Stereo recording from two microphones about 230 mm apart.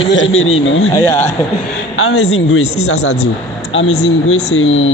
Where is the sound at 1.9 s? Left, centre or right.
Left.